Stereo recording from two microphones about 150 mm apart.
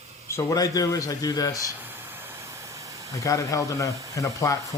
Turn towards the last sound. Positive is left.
turn(degrees=20)  # may be behind; listen again after turning